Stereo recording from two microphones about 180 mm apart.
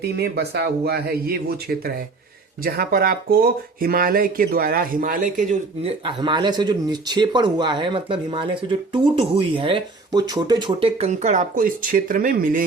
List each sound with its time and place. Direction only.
0.2 s speech: 65° right (ahead or behind)
2.6 s speech: 55° right (ahead or behind)
5.8 s speech: 25° right (ahead or behind); by 12.6 s 50° right (ahead or behind)